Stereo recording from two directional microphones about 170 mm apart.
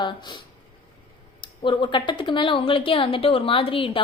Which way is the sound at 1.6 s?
30° left (ahead or behind).